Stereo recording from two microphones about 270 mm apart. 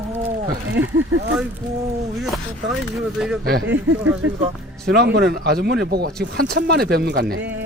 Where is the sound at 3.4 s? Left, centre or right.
Right.